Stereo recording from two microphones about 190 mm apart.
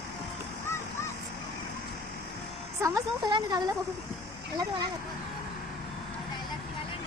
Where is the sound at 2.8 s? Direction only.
20° right (ahead or behind).